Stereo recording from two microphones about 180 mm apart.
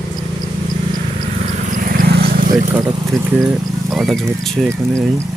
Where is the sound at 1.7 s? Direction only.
50° right (ahead or behind).